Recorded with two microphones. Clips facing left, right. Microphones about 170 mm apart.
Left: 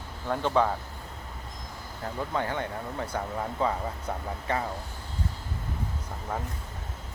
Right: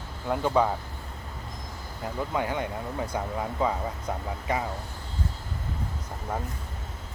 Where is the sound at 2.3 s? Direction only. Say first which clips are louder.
Right 1 dB; 15° right (ahead or behind).